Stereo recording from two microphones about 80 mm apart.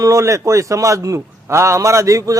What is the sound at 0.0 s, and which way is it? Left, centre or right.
A man's voice, right.